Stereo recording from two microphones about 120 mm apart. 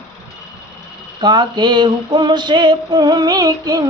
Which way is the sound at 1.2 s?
40° right (ahead or behind).